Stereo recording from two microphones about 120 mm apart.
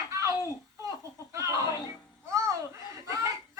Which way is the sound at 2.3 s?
25° right (ahead or behind).